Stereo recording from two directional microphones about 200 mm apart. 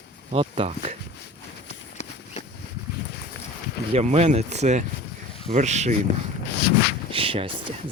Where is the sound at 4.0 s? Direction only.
35° right (ahead or behind).